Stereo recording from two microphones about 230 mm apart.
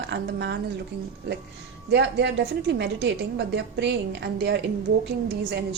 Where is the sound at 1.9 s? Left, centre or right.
Right.